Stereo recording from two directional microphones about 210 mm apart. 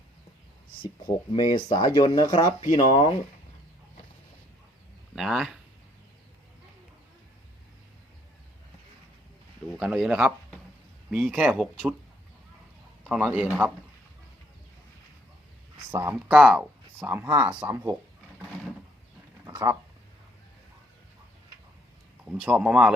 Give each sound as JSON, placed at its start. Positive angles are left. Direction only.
{"t": 0.8, "sound": "speech", "side_deg": 20}
{"t": 5.1, "sound": "speech", "side_deg": 0}
{"t": 9.6, "sound": "speech", "side_deg": 0}
{"t": 13.1, "sound": "a man's voice", "side_deg": -5}
{"t": 15.9, "sound": "speech", "side_deg": -15}
{"t": 22.2, "sound": "speech", "side_deg": -5}